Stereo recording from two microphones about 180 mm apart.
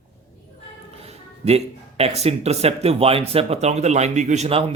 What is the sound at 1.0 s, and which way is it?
Speech, 35° right (ahead or behind).